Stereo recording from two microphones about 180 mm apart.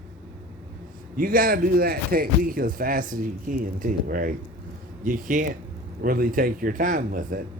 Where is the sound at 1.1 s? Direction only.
50° right (ahead or behind).